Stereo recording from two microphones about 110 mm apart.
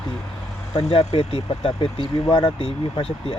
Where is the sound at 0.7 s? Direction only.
70° left (ahead or behind).